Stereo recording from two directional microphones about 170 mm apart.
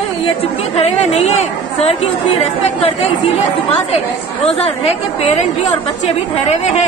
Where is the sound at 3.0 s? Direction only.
40° left (ahead or behind).